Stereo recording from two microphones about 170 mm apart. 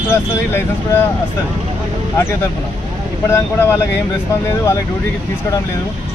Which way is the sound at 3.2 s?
15° left (ahead or behind).